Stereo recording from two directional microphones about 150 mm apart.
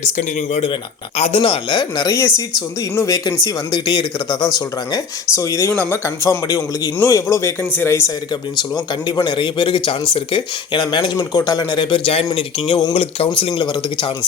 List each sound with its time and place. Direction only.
0.2 s a man's voice: 45° left (ahead or behind); by 8.1 s 15° left (ahead or behind)
8.5 s speech: 30° left (ahead or behind)